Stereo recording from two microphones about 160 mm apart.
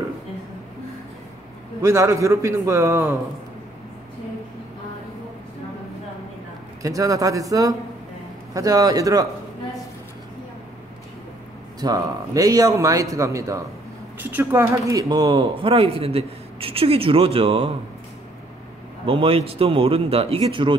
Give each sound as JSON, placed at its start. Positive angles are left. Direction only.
{"t": 1.8, "sound": "a man's voice", "side_deg": -20}
{"t": 6.8, "sound": "a man's voice", "side_deg": -20}
{"t": 11.8, "sound": "a man's voice", "side_deg": -20}
{"t": 19.0, "sound": "speech", "side_deg": -35}